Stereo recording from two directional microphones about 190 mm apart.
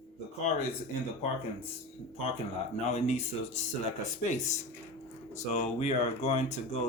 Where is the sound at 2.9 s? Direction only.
35° left (ahead or behind).